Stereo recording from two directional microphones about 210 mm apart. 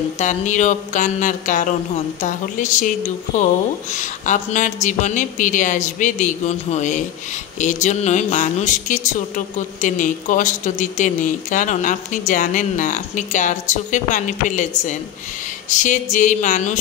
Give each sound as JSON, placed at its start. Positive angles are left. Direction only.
{"t": 0.2, "sound": "speech", "side_deg": 35}
{"t": 15.7, "sound": "speech", "side_deg": 35}